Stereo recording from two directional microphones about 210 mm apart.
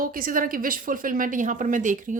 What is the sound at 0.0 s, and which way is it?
Speech, 40° right (ahead or behind).